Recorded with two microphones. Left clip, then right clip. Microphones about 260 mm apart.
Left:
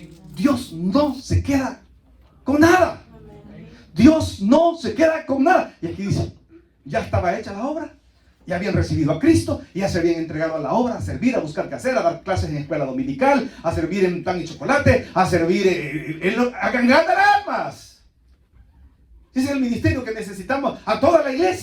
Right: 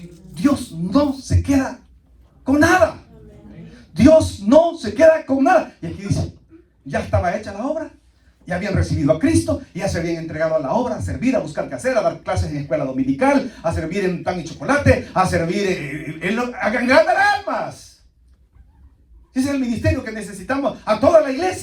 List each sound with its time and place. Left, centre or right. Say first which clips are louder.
0.3 s a man's voice: right 1 dB; right
3.9 s a man's voice: right 4 dB; right
19.3 s a man's voice: right 1 dB; right